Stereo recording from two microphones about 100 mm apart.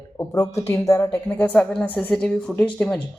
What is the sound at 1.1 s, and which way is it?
A woman's voice, 15° left (ahead or behind).